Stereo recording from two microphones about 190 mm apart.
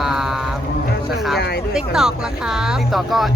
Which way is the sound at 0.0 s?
Centre (ahead or behind).